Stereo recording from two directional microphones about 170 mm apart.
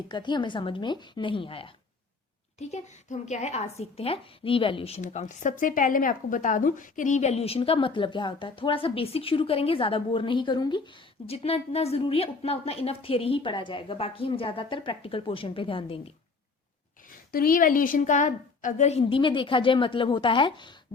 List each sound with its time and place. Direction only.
0.1 s a woman's voice: 25° left (ahead or behind)
2.6 s a woman's voice: 40° left (ahead or behind)
17.3 s a woman's voice: 55° left (ahead or behind); by 20.7 s 30° left (ahead or behind)